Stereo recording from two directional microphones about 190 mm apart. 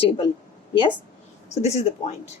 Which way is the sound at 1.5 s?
35° left (ahead or behind).